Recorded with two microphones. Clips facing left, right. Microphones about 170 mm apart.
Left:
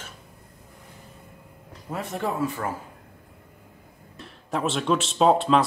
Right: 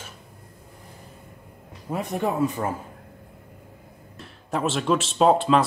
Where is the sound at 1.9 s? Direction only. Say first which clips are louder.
Right 3 dB; 15° right (ahead or behind).